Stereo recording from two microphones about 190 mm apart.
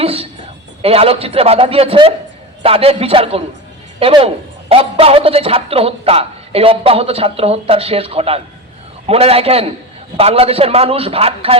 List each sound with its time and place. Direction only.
0.0 s a woman's voice: 30° right (ahead or behind)